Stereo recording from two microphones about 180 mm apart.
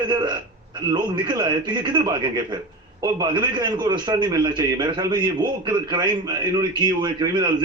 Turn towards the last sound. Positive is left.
turn(degrees=-25)  # may be behind; listen again after turning